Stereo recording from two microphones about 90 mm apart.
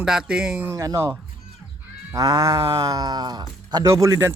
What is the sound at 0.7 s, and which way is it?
Speech, 35° right (ahead or behind).